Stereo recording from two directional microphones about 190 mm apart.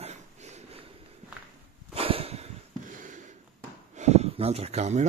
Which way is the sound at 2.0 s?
30° right (ahead or behind).